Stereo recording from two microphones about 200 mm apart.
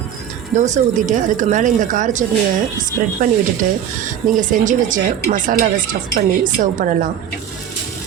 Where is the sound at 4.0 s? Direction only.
40° right (ahead or behind).